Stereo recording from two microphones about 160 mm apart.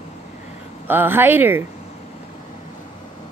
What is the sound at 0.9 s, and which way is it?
Speech, 15° right (ahead or behind).